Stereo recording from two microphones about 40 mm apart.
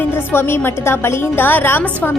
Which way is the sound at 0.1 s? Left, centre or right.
Left.